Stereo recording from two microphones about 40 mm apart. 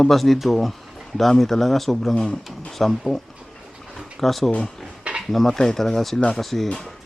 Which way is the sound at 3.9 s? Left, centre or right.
Centre.